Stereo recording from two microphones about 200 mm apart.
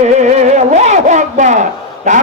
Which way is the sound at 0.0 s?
35° right (ahead or behind).